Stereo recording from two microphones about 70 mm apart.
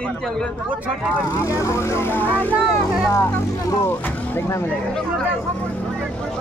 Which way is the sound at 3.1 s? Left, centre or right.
Left.